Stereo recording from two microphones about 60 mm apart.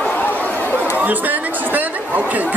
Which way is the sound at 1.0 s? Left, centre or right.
Right.